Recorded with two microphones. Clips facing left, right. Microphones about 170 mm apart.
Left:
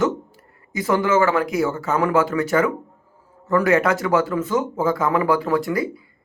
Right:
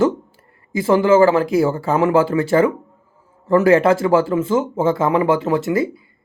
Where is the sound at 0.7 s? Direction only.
25° right (ahead or behind).